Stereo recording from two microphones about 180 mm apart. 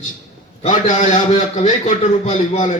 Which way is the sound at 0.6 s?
40° left (ahead or behind).